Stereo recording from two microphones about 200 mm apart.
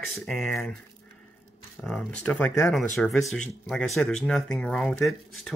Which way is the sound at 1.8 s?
5° left (ahead or behind).